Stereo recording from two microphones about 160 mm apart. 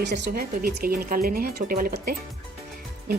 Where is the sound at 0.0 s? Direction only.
90° right.